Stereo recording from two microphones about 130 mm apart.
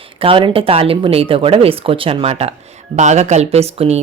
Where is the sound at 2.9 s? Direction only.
65° right (ahead or behind).